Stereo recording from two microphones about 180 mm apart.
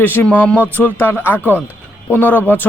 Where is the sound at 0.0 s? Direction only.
10° left (ahead or behind).